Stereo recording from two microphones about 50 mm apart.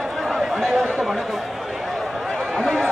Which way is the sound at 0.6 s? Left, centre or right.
Centre.